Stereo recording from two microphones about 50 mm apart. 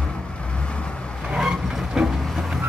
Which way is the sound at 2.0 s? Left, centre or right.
Centre.